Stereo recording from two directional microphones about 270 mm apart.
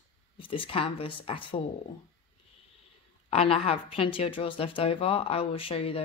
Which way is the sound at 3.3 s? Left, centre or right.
Left.